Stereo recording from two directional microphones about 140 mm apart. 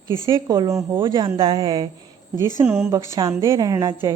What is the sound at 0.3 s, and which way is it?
Speech, 30° right (ahead or behind).